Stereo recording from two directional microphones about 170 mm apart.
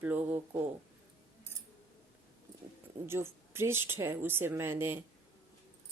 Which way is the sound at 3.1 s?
15° right (ahead or behind).